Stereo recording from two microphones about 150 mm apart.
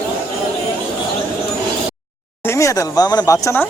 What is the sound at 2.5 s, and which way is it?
Speech, 20° left (ahead or behind).